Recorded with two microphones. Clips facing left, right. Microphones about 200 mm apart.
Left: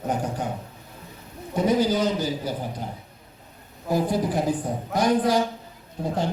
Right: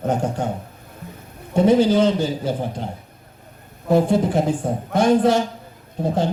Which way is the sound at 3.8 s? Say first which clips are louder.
Right 6 dB; 25° right (ahead or behind).